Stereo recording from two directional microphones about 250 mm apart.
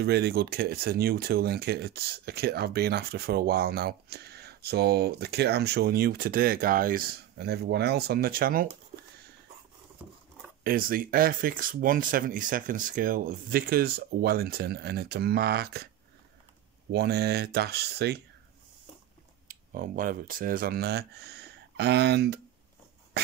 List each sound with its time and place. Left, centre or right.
0.0 s speech: right
10.6 s speech: right
16.9 s speech: right
19.4 s speech: right
23.2 s dog: right